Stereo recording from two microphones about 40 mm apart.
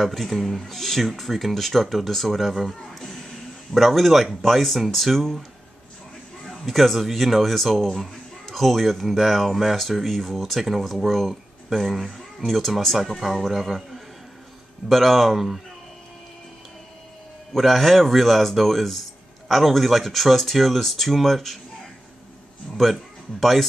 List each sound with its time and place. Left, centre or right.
0.0 s speech: centre
2.9 s a sound: centre
3.7 s speech: centre
6.5 s a man's voice: centre
17.5 s speech: centre
22.8 s speech: centre